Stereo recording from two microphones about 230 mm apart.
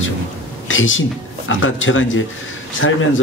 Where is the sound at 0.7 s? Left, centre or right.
Left.